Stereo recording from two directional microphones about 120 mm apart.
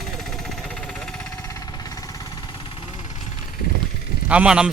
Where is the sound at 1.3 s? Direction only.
25° left (ahead or behind).